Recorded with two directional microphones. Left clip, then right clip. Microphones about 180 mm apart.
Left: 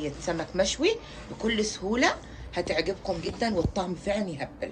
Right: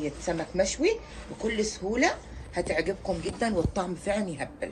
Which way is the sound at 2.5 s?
30° right (ahead or behind).